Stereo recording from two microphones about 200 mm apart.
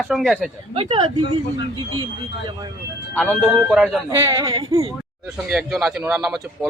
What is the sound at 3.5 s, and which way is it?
Speech, 5° right (ahead or behind).